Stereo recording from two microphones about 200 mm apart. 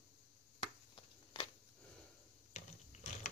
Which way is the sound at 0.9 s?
25° left (ahead or behind).